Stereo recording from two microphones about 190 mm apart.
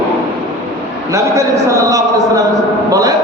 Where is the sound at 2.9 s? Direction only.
20° right (ahead or behind).